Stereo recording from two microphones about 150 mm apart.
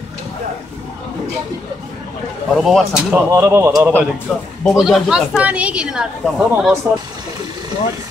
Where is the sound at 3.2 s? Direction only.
15° right (ahead or behind).